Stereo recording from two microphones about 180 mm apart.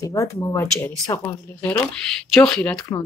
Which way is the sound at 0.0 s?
20° left (ahead or behind).